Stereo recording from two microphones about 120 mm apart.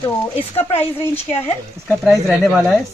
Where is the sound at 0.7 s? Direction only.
20° left (ahead or behind).